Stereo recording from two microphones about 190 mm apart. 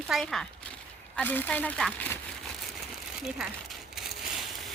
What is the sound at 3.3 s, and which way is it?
Speech, 5° right (ahead or behind).